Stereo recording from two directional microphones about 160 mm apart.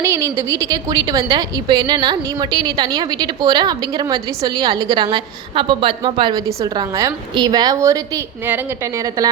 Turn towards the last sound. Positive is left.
turn(degrees=-20)  # may be behind; listen again after turning